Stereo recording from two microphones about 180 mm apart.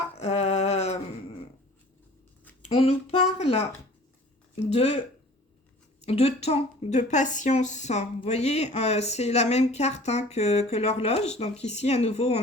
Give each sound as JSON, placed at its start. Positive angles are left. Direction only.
{"t": 0.2, "sound": "a sound", "side_deg": 35}
{"t": 2.6, "sound": "a woman's voice", "side_deg": 35}
{"t": 4.6, "sound": "a woman's voice", "side_deg": 35}
{"t": 6.0, "sound": "a woman's voice", "side_deg": 35}